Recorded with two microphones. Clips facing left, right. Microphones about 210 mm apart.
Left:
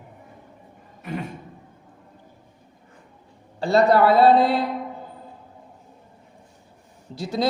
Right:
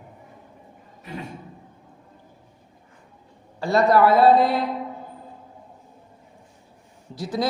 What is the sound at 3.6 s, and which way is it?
A man's voice, 30° left (ahead or behind).